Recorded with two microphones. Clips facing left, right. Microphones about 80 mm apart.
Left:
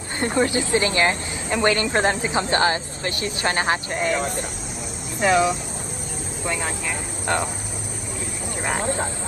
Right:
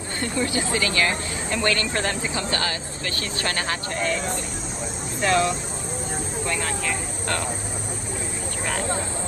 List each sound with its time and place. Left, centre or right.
0.2 s a woman's voice: left
5.2 s speech: centre